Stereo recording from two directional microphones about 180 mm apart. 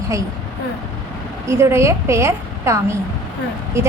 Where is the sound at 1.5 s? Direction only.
15° right (ahead or behind).